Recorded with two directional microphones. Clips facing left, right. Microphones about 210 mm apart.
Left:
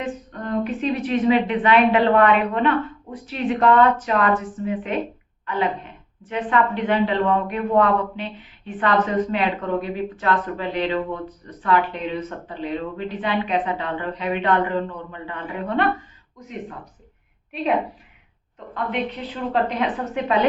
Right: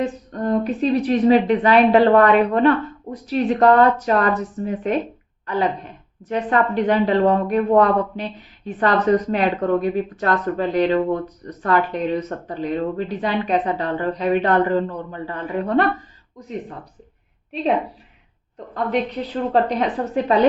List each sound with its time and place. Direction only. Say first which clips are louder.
0.0 s a woman's voice: right 6 dB; 40° right (ahead or behind)
18.7 s a woman's voice: right 4 dB; 40° right (ahead or behind)